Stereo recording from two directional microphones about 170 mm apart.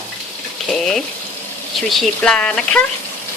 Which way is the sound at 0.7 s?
Centre (ahead or behind).